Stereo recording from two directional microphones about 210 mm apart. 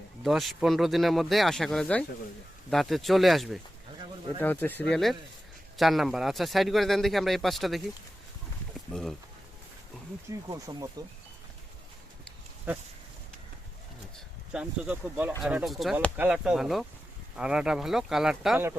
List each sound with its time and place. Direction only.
0.2 s a man's voice: centre (ahead or behind)
8.9 s a man's voice: 5° left (ahead or behind)
10.2 s speech: 15° right (ahead or behind)
14.5 s a man's voice: 5° right (ahead or behind)